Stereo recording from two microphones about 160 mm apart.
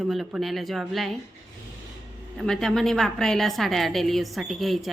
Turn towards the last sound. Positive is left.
turn(degrees=0)  # may be behind; listen again after turning